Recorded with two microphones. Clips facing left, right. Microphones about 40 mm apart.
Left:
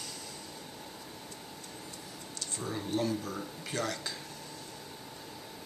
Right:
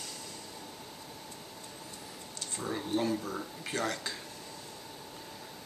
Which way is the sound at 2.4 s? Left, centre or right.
Centre.